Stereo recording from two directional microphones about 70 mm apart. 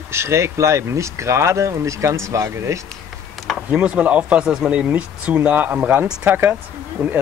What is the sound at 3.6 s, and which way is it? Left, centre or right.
Speech, centre.